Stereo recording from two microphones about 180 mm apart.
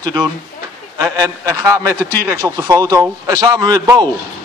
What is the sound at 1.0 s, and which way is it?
A man's voice, 15° right (ahead or behind).